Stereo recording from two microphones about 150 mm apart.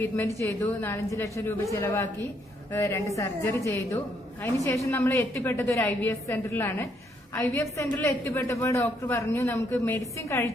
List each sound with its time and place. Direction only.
0.0 s a woman's voice: 20° left (ahead or behind)